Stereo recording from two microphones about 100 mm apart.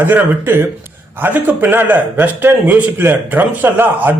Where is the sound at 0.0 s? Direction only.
20° right (ahead or behind).